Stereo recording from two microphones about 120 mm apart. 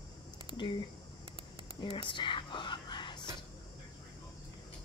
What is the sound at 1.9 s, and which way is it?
Whispering, 45° left (ahead or behind).